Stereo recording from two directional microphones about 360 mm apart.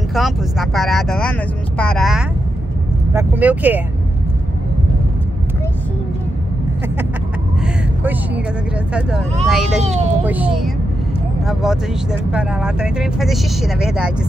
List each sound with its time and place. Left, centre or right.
0.1 s speech: centre
7.6 s a sound: centre
9.5 s speech: centre
9.8 s speech: centre
10.2 s speech: centre